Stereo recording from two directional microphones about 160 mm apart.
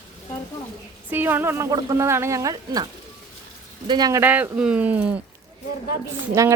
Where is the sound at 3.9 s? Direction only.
25° right (ahead or behind).